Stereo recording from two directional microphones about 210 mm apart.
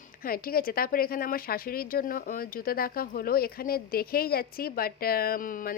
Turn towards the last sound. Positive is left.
turn(degrees=40)  # may be behind; listen again after turning